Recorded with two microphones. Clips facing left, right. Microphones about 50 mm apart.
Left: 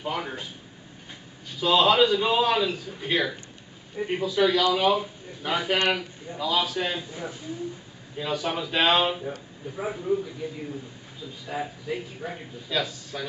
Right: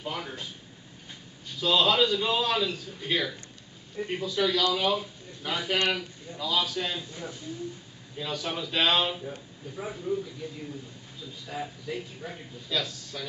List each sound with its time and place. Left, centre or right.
0.0 s a man's voice: centre
1.6 s a man's voice: centre